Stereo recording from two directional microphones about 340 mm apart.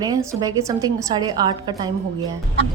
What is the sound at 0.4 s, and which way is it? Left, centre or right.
Speech, centre.